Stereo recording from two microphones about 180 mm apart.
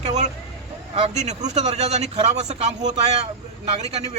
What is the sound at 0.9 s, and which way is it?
Speech, 35° right (ahead or behind).